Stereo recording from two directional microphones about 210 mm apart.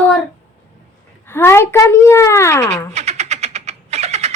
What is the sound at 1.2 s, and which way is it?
Speech, 10° left (ahead or behind).